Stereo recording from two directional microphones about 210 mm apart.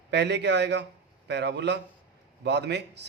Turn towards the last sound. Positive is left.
turn(degrees=-55)  # may be behind; listen again after turning